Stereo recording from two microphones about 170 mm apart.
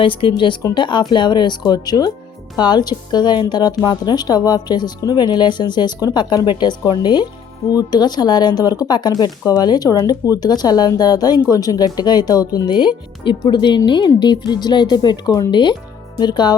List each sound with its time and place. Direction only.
0.0 s a woman's voice: 30° left (ahead or behind)